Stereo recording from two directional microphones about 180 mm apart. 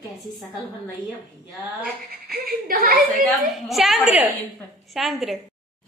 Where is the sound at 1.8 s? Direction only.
55° right (ahead or behind).